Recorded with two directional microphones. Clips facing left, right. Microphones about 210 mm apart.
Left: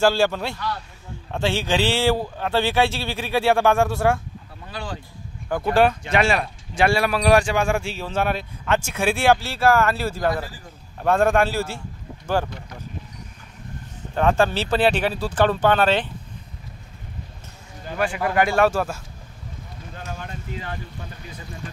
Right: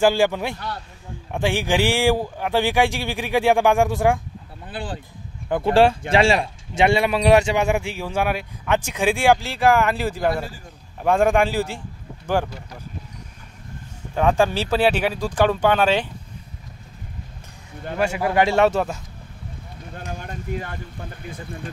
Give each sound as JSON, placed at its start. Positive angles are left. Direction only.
{"t": 0.0, "sound": "speech", "side_deg": -15}
{"t": 5.5, "sound": "speech", "side_deg": -30}
{"t": 14.1, "sound": "speech", "side_deg": -10}
{"t": 17.9, "sound": "speech", "side_deg": -25}
{"t": 20.2, "sound": "a sound", "side_deg": -50}
{"t": 21.2, "sound": "speech", "side_deg": -50}